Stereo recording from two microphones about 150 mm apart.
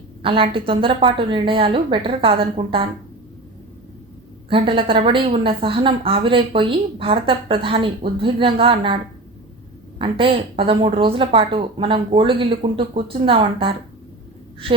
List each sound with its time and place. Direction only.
0.2 s a woman's voice: 35° right (ahead or behind)
4.4 s a woman's voice: 35° right (ahead or behind)
10.0 s a woman's voice: 35° right (ahead or behind)